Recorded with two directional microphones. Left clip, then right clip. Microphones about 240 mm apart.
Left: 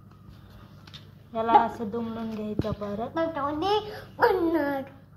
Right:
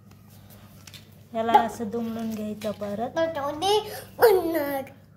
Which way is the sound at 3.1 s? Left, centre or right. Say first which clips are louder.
Right 1 dB; right.